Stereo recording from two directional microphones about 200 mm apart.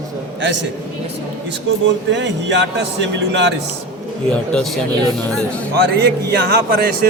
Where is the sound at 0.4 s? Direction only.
60° right (ahead or behind).